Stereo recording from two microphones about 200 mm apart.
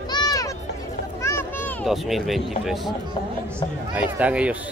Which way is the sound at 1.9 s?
Centre (ahead or behind).